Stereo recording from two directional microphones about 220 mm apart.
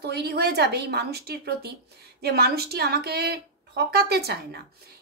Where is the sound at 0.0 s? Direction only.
50° right (ahead or behind).